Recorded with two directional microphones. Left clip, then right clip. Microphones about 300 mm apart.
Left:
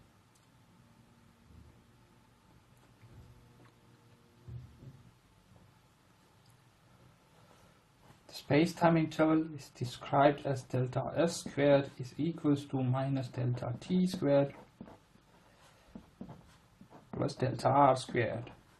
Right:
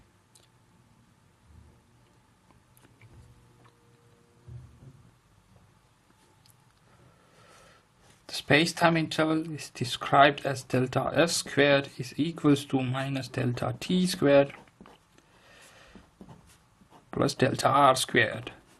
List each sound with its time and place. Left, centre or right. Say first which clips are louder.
8.4 s speech: right 5 dB; right
14.8 s a sound: right 1 dB; right
17.1 s speech: right 9 dB; right